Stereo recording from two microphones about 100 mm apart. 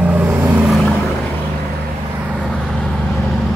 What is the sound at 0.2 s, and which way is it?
Vehicle, 20° right (ahead or behind).